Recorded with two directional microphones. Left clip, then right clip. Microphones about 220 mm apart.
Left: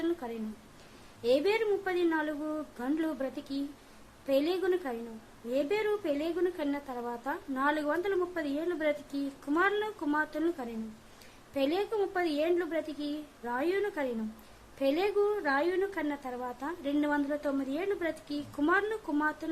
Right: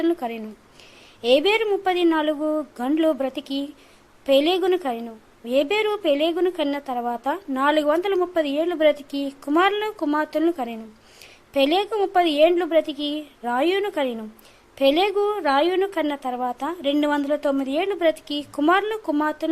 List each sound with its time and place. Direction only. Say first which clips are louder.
0.0 s a woman's voice: right 10 dB; 35° right (ahead or behind)